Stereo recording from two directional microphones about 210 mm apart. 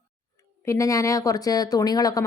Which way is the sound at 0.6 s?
15° left (ahead or behind).